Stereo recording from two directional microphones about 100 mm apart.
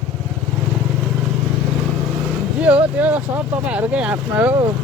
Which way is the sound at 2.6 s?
15° right (ahead or behind).